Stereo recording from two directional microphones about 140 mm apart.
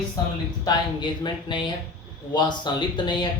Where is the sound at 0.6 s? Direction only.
30° left (ahead or behind).